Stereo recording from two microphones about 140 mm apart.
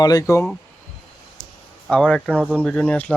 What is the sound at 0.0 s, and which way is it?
Speech, 25° left (ahead or behind).